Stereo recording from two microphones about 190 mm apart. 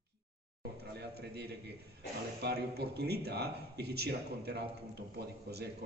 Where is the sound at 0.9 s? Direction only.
60° right (ahead or behind).